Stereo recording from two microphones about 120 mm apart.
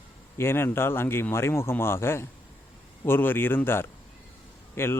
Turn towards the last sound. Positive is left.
turn(degrees=20)  # may be behind; listen again after turning